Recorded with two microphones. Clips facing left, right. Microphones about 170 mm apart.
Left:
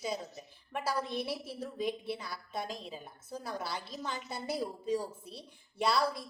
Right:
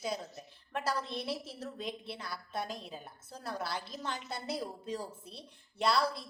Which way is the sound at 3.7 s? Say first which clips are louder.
Even; 10° left (ahead or behind).